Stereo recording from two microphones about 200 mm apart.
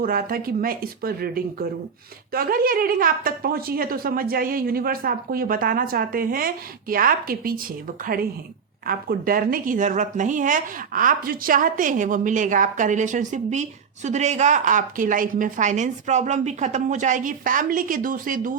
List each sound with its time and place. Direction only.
0.0 s a woman's voice: 45° right (ahead or behind)
8.9 s speech: 45° right (ahead or behind)